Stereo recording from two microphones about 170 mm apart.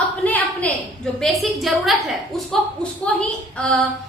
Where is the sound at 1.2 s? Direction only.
Centre (ahead or behind).